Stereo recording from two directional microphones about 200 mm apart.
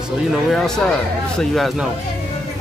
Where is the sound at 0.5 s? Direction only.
Centre (ahead or behind).